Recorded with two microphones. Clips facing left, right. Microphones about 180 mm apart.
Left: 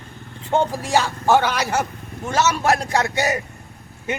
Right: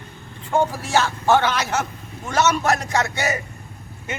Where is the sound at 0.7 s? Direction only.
15° left (ahead or behind).